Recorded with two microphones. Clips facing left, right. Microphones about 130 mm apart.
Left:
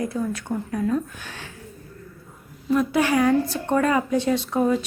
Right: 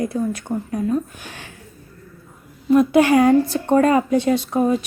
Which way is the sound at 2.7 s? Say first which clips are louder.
Right 7 dB; 20° right (ahead or behind).